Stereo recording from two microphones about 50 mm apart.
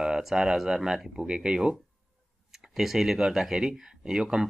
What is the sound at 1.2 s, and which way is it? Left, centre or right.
Speech, centre.